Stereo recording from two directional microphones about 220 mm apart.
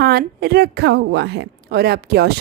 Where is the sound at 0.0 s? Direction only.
45° right (ahead or behind).